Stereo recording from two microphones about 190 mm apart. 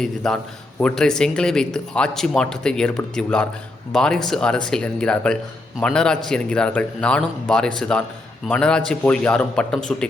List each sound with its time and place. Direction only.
0.0 s speech: centre (ahead or behind)